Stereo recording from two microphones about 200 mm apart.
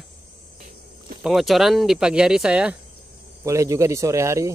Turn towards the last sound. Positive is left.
turn(degrees=-15)  # may be behind; listen again after turning